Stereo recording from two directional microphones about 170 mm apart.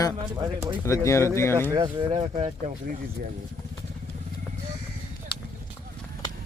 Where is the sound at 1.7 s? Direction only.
30° right (ahead or behind).